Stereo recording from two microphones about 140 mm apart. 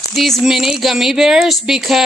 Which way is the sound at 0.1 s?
Centre (ahead or behind).